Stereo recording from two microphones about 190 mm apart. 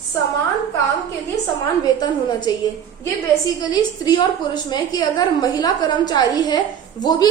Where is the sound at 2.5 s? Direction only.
20° left (ahead or behind).